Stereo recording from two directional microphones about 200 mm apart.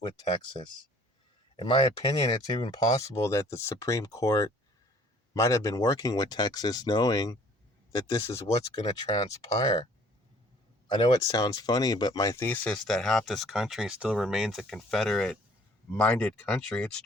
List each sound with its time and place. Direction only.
1.5 s speech: 25° left (ahead or behind)
10.8 s speech: 25° left (ahead or behind); by 17.0 s 5° left (ahead or behind)